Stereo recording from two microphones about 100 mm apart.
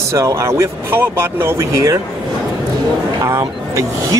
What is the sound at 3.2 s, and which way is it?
Speech, 35° right (ahead or behind).